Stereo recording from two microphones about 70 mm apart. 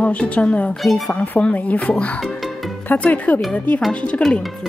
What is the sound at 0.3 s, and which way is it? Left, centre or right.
Speech, centre.